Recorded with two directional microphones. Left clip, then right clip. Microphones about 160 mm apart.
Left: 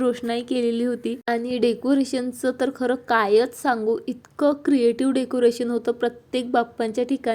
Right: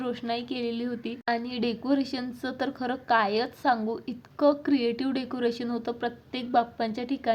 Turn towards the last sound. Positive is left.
turn(degrees=35)  # may be behind; listen again after turning